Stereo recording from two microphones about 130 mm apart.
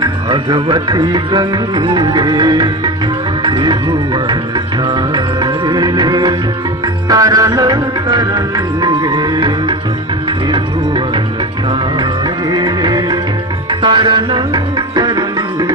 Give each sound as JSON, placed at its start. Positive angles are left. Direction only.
{"t": 0.0, "sound": "music", "side_deg": -35}
{"t": 12.5, "sound": "music", "side_deg": -35}